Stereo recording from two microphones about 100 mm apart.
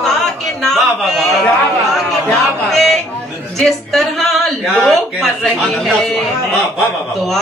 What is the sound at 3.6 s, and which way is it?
Speech, centre (ahead or behind).